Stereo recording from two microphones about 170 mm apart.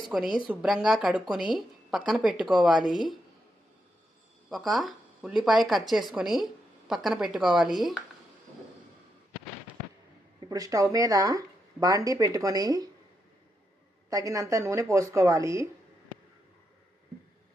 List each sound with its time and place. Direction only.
0.1 s a woman's voice: 5° right (ahead or behind)
4.4 s a woman's voice: centre (ahead or behind)
10.5 s speech: 20° right (ahead or behind)
14.1 s a woman's voice: 20° right (ahead or behind)